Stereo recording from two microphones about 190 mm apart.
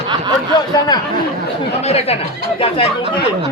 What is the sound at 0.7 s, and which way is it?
Speech, 20° left (ahead or behind).